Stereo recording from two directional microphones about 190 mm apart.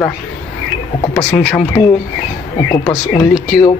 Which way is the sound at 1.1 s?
10° left (ahead or behind).